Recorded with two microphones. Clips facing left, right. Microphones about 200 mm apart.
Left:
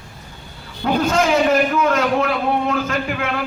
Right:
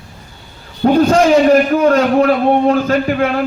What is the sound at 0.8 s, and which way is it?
A man's voice, 35° right (ahead or behind).